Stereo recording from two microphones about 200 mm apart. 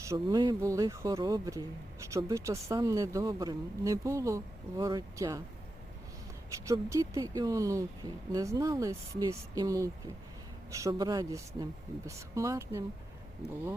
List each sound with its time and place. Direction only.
0.0 s speech: 15° right (ahead or behind)
6.7 s speech: 15° right (ahead or behind)